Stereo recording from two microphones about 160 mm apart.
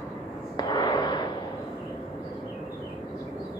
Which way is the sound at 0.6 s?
25° left (ahead or behind).